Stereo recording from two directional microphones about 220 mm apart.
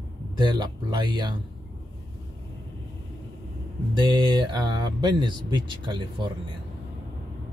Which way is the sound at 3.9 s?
20° right (ahead or behind).